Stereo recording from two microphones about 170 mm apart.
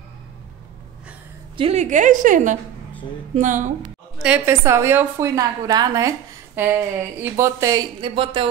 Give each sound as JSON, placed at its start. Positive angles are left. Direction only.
{"t": 1.6, "sound": "a woman's voice", "side_deg": -40}
{"t": 4.2, "sound": "a woman's voice", "side_deg": -10}